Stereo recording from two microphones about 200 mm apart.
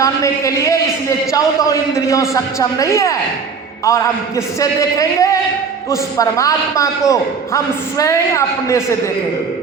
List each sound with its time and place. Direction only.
0.0 s a man's voice: 15° left (ahead or behind)